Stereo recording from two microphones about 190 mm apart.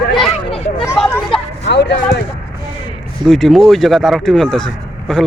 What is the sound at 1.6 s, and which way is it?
Speech, 65° left (ahead or behind).